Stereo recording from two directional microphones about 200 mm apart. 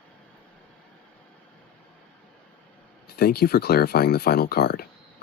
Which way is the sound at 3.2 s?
50° left (ahead or behind).